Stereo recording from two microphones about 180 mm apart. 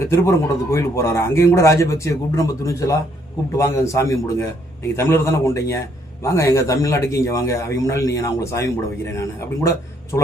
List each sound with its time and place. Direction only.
0.0 s a man's voice: 15° left (ahead or behind)